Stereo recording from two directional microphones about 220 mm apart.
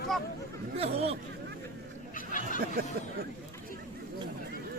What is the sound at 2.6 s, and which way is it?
Speech, 45° right (ahead or behind).